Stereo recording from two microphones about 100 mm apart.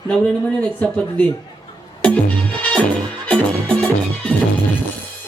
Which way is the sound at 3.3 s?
10° left (ahead or behind).